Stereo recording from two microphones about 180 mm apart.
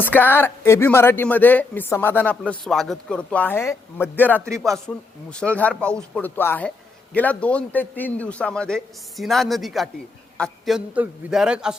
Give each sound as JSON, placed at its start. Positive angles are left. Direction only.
{"t": 0.0, "sound": "a man's voice", "side_deg": 10}
{"t": 4.4, "sound": "speech", "side_deg": -15}
{"t": 4.9, "sound": "a man's voice", "side_deg": 10}